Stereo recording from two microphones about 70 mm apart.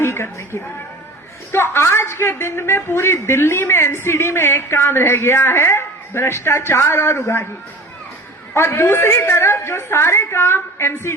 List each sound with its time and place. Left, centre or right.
0.0 s a woman's voice: left
8.5 s a woman's voice: left